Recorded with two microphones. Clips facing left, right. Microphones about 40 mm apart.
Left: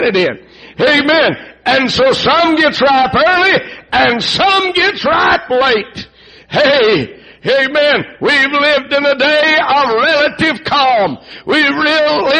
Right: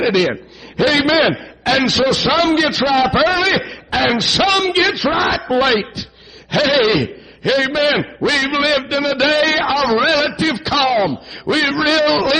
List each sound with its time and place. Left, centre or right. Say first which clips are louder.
0.7 s a man's voice: left 4 dB; left
10.3 s a man's voice: left 4 dB; left
11.8 s a man's voice: left 3 dB; centre